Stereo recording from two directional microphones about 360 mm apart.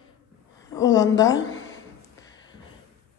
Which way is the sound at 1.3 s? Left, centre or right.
Left.